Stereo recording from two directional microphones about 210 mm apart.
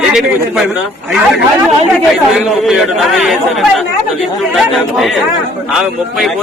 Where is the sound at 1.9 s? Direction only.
Centre (ahead or behind).